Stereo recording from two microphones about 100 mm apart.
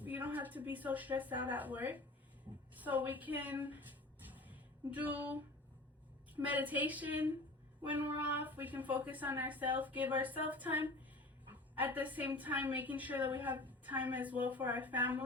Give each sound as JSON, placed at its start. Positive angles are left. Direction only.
{"t": 0.0, "sound": "a woman's voice", "side_deg": -15}
{"t": 4.3, "sound": "a sound", "side_deg": -15}
{"t": 6.3, "sound": "a woman's voice", "side_deg": -15}